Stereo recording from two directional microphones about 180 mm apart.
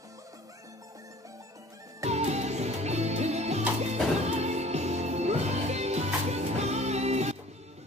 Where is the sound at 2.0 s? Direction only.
35° right (ahead or behind).